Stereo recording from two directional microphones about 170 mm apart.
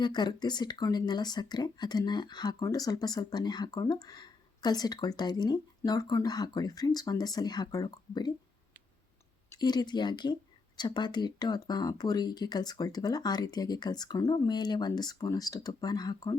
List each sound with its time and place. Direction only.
0.0 s speech: 25° left (ahead or behind)
9.5 s speech: 25° left (ahead or behind)